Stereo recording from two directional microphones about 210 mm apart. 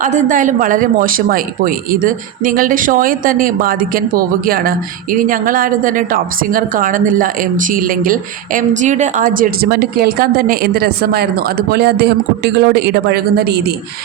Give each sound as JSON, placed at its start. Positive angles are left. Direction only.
{"t": 0.0, "sound": "a woman's voice", "side_deg": -35}